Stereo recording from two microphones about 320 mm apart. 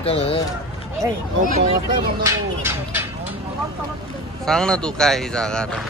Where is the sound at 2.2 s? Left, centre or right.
Centre.